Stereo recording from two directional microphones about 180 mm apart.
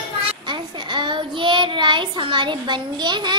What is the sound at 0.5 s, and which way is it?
Child singing, 25° right (ahead or behind).